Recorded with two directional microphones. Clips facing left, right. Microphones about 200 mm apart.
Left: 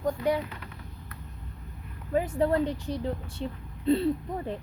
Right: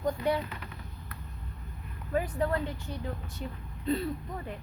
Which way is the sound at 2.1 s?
25° left (ahead or behind).